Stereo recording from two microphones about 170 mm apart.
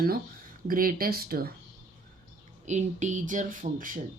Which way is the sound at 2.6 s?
45° right (ahead or behind).